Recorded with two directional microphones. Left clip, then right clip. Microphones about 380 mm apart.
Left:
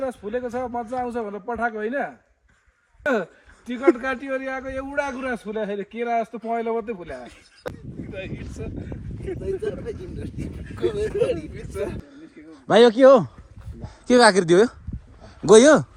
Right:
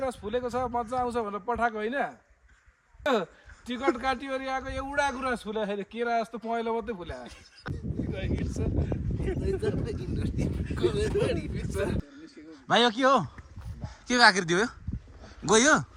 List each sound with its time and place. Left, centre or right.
0.0 s a man's voice: centre
8.5 s a man's voice: centre
10.3 s speech: right
10.8 s a man's voice: centre
14.1 s speech: centre